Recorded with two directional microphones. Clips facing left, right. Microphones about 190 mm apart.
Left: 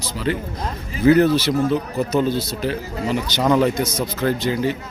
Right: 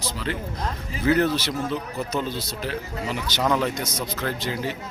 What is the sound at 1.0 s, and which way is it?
Speech, 10° left (ahead or behind).